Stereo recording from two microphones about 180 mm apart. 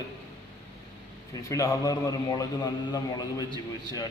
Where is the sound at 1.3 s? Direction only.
20° left (ahead or behind).